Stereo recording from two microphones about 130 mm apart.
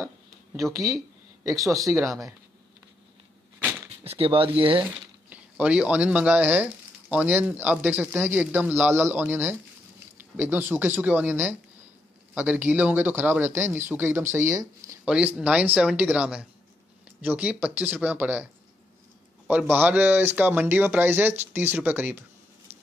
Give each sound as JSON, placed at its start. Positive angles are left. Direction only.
{"t": 1.4, "sound": "speech", "side_deg": -25}
{"t": 4.0, "sound": "speech", "side_deg": -50}
{"t": 5.3, "sound": "speech", "side_deg": -10}
{"t": 15.0, "sound": "speech", "side_deg": -10}